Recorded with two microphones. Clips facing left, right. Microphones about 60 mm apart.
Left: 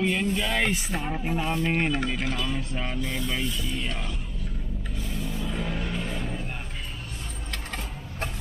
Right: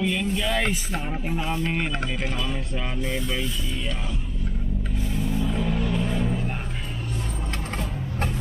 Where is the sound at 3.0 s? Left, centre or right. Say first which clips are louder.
Right 5 dB; centre.